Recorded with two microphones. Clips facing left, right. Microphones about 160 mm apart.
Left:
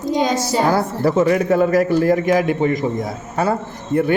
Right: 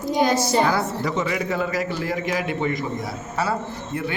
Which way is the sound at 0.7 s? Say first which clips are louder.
Left 7 dB; 50° left (ahead or behind).